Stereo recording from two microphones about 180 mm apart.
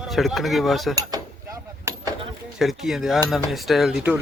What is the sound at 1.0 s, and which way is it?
Keys jangling, 20° right (ahead or behind).